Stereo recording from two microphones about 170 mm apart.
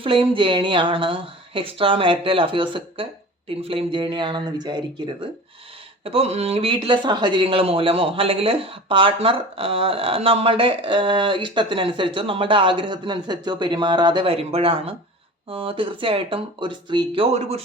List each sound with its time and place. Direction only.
0.0 s speech: 30° right (ahead or behind)
6.1 s speech: 35° right (ahead or behind)